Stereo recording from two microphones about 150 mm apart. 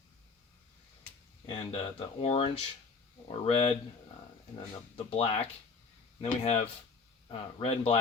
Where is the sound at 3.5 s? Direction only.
40° left (ahead or behind).